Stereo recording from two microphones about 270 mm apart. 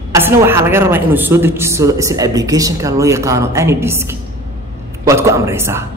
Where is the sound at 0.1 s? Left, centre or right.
Centre.